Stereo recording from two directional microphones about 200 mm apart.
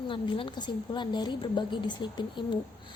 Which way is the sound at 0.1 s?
25° left (ahead or behind).